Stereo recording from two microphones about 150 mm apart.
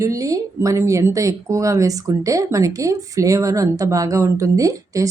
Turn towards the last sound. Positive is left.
turn(degrees=-20)  # may be behind; listen again after turning